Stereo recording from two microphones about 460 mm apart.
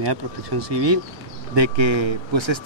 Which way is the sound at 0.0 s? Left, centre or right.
Right.